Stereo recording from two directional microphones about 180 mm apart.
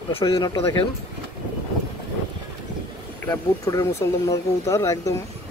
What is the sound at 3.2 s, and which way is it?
Speech, 15° left (ahead or behind).